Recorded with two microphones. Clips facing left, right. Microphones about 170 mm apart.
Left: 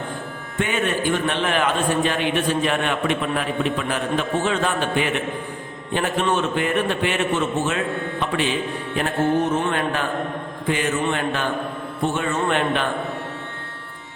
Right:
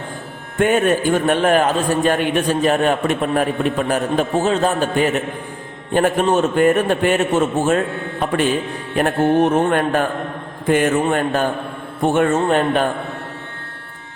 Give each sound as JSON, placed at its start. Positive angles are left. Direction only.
{"t": 0.6, "sound": "a man's voice", "side_deg": -45}
{"t": 9.0, "sound": "a man's voice", "side_deg": -55}
{"t": 12.1, "sound": "speech", "side_deg": -55}
{"t": 12.5, "sound": "a man's voice", "side_deg": -40}